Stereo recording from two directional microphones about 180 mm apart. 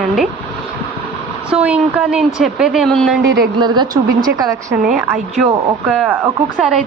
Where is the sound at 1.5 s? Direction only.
10° right (ahead or behind).